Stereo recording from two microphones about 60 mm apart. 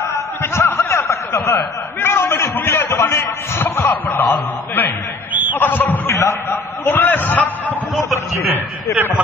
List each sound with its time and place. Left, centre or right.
0.4 s a sound: left
2.0 s a sound: left
2.5 s speech: left
3.9 s speech: left
6.0 s speech: left
6.8 s a man's voice: left